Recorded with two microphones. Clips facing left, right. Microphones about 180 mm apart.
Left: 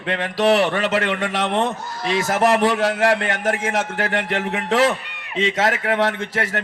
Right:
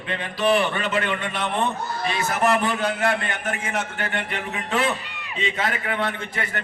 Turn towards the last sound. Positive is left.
turn(degrees=90)